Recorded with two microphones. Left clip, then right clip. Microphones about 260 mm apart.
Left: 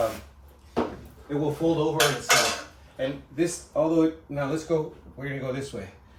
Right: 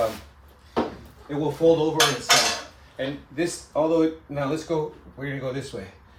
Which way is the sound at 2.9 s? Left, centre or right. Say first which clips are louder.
Even; right.